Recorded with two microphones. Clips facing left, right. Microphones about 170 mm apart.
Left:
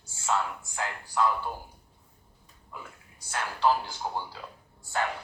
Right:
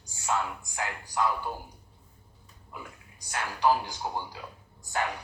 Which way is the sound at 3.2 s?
15° right (ahead or behind).